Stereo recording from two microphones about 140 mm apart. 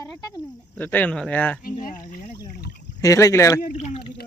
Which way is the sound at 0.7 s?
10° left (ahead or behind).